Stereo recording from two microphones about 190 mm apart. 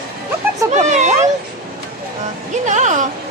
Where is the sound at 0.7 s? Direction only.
40° right (ahead or behind).